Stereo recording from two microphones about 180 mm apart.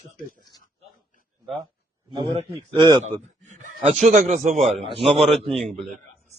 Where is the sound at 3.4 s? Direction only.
40° right (ahead or behind).